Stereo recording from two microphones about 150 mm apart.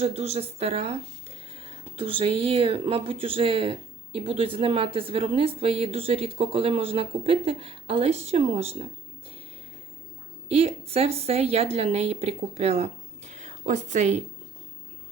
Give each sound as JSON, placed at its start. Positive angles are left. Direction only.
{"t": 0.0, "sound": "speech", "side_deg": -45}
{"t": 10.5, "sound": "a woman's voice", "side_deg": -40}